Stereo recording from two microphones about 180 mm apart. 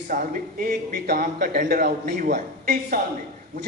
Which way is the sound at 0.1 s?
50° right (ahead or behind).